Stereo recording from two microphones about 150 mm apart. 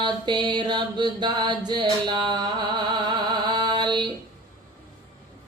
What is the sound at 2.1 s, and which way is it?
Music, 30° right (ahead or behind).